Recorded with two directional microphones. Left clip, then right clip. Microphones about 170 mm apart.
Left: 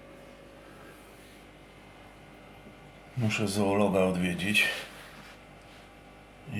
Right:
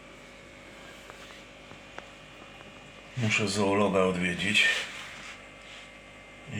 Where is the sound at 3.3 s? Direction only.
15° left (ahead or behind).